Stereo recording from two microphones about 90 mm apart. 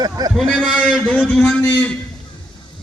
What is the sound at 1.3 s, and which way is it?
Speech, 10° left (ahead or behind).